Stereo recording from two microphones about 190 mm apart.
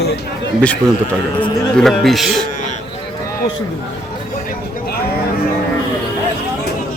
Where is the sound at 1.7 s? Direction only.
Centre (ahead or behind).